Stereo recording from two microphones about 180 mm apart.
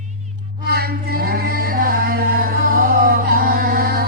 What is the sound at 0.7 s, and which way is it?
A capella, 60° right (ahead or behind).